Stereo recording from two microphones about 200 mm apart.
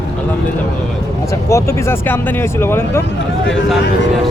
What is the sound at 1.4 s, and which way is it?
Speech, 15° left (ahead or behind).